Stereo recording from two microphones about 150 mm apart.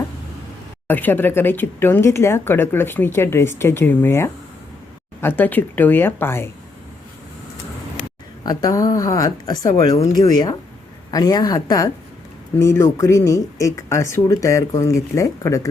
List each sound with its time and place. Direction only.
0.9 s speech: 10° left (ahead or behind)
8.4 s speech: 25° left (ahead or behind)